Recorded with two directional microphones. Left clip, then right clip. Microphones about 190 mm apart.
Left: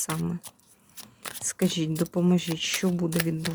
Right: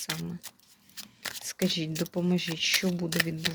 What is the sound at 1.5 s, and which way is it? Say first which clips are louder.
Speech: left 3 dB; 25° left (ahead or behind).